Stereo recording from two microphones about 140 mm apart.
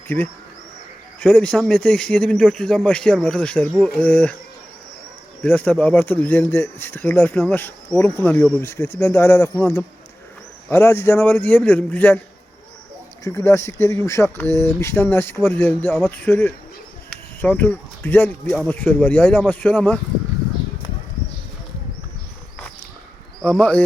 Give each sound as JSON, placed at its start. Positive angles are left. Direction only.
{"t": 1.2, "sound": "speech", "side_deg": 10}
{"t": 5.4, "sound": "speech", "side_deg": 10}
{"t": 13.2, "sound": "speech", "side_deg": 20}
{"t": 23.4, "sound": "speech", "side_deg": 10}